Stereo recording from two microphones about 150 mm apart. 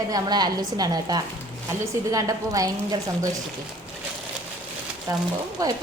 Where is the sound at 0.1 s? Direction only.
25° right (ahead or behind).